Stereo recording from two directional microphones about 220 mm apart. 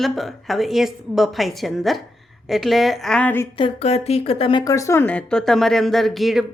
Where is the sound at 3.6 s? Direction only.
25° left (ahead or behind); by 6.5 s centre (ahead or behind).